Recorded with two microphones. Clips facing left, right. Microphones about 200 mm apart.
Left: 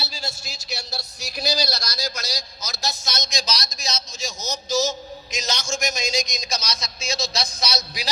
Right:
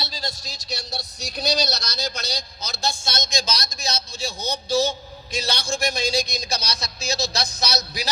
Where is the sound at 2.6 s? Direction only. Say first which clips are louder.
Right 2 dB; 30° right (ahead or behind).